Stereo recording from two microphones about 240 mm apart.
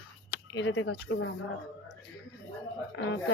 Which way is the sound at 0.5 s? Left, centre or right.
Left.